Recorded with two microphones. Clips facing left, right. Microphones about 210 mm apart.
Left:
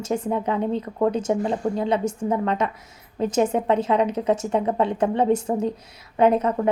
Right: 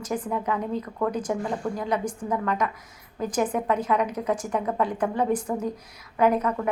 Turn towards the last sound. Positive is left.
turn(degrees=25)  # may be behind; listen again after turning